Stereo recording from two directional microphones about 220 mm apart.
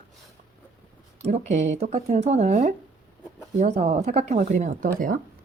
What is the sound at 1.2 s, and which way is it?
Speech, 30° right (ahead or behind).